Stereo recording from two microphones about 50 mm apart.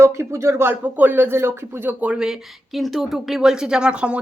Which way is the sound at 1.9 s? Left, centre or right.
Right.